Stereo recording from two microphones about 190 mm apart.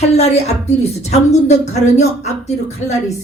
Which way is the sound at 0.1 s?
35° left (ahead or behind).